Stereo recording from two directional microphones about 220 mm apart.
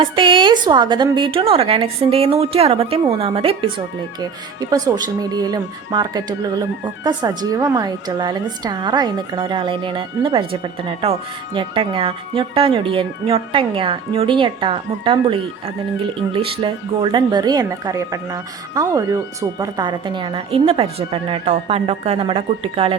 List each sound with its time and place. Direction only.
0.0 s speech: 20° right (ahead or behind)